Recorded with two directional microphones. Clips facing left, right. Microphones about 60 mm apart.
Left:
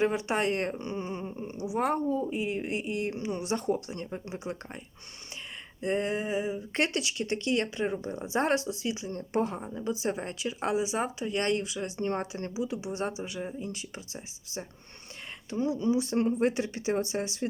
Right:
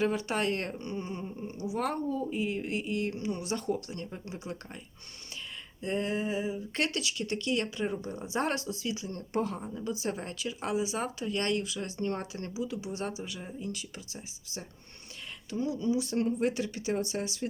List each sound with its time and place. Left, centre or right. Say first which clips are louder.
0.0 s speech: left 2 dB; left
5.8 s speech: left 2 dB; left